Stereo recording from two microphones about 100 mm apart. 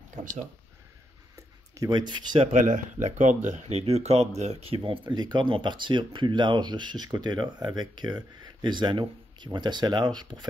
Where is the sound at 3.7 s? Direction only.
90° right.